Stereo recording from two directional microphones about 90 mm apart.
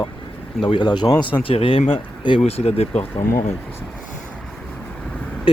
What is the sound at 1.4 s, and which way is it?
Speech, 90° left.